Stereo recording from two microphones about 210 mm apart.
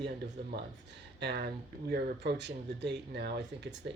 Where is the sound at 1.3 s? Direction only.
50° right (ahead or behind).